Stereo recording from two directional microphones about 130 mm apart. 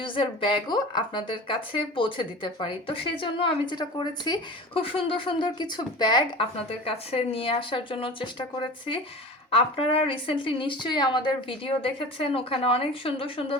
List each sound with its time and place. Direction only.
0.0 s a woman's voice: 40° left (ahead or behind)